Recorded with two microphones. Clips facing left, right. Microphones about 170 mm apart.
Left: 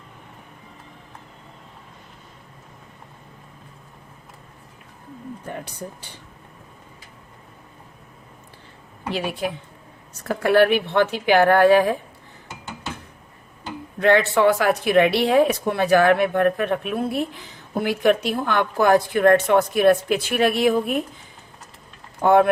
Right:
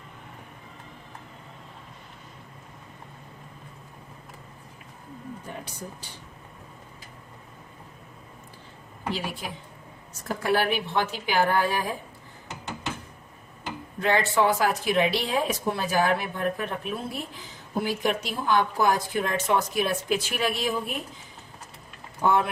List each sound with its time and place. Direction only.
5.5 s speech: 60° left (ahead or behind)
9.1 s speech: 65° left (ahead or behind)
14.0 s speech: 65° left (ahead or behind)
22.2 s speech: 60° left (ahead or behind)